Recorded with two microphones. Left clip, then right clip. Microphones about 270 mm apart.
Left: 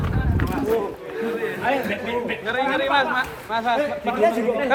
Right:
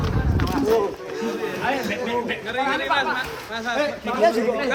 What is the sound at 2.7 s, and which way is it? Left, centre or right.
Speech, centre.